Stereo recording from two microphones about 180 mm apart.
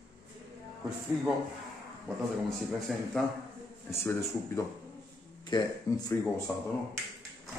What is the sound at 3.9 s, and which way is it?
Speech, 15° left (ahead or behind).